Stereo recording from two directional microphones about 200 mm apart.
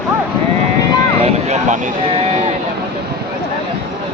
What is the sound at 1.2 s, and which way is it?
Vehicle, 35° right (ahead or behind).